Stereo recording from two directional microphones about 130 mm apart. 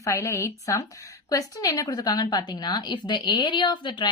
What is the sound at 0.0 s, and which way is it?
A woman's voice, 20° left (ahead or behind).